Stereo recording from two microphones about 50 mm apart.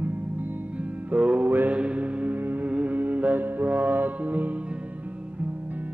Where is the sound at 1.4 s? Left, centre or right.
Right.